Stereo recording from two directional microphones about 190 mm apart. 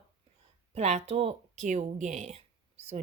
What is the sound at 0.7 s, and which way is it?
Speech, 35° right (ahead or behind).